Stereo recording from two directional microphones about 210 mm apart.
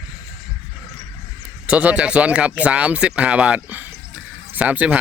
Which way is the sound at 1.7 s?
5° right (ahead or behind).